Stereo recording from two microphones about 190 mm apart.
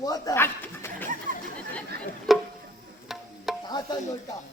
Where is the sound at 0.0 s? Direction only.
20° left (ahead or behind).